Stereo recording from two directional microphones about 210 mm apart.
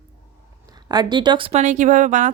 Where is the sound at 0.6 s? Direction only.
20° right (ahead or behind); by 2.3 s 35° right (ahead or behind).